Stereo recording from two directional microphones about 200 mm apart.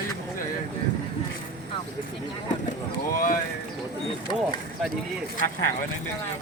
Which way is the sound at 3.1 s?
45° left (ahead or behind).